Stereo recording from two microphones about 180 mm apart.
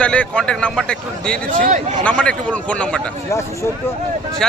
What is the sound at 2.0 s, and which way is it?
A man's voice, 5° left (ahead or behind).